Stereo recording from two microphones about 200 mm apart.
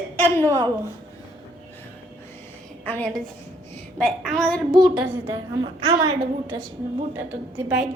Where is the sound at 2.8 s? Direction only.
5° left (ahead or behind).